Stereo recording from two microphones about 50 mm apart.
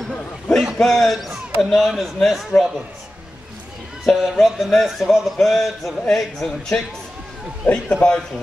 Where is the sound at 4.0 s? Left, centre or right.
Centre.